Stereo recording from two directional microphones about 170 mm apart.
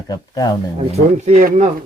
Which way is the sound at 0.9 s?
40° right (ahead or behind).